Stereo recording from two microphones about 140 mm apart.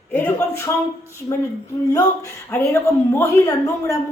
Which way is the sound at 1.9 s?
25° left (ahead or behind).